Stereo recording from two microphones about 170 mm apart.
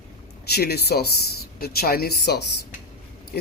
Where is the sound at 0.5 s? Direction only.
70° left (ahead or behind).